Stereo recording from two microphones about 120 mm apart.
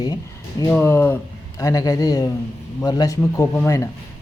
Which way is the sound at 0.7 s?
15° left (ahead or behind).